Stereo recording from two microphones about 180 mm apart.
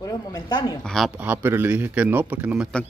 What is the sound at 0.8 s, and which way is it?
Speech, centre (ahead or behind).